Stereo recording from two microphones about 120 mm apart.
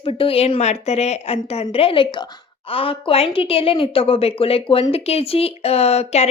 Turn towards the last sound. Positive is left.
turn(degrees=60)  # may be behind; listen again after turning